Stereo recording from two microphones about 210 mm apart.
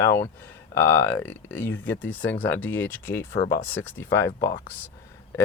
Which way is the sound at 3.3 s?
50° left (ahead or behind).